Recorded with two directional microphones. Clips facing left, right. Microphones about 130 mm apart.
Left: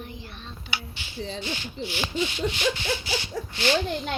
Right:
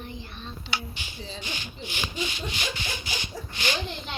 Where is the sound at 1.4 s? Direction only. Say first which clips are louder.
Left 5 dB; 15° right (ahead or behind).